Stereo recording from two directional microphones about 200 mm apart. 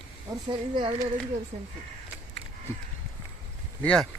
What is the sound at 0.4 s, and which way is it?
Speech, 25° right (ahead or behind).